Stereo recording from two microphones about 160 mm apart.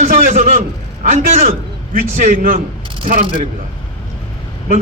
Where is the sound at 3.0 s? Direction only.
65° right (ahead or behind).